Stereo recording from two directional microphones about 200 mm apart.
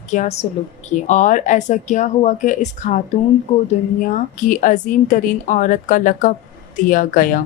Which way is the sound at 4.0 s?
40° left (ahead or behind).